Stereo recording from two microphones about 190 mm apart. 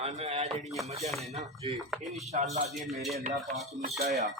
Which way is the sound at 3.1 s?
40° right (ahead or behind).